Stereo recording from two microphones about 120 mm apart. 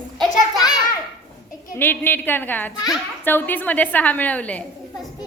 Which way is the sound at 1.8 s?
15° left (ahead or behind).